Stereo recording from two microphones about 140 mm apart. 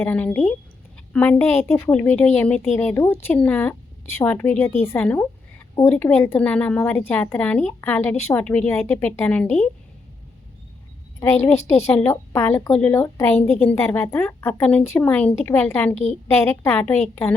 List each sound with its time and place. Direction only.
0.0 s a woman's voice: 10° left (ahead or behind)
11.2 s a woman's voice: 15° left (ahead or behind)